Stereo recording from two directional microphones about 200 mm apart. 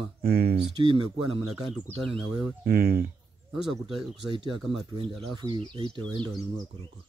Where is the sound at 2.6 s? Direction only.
50° right (ahead or behind).